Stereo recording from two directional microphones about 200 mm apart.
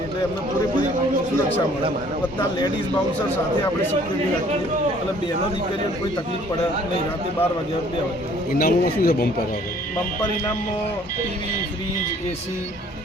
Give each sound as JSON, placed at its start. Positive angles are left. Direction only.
{"t": 8.5, "sound": "speech", "side_deg": 50}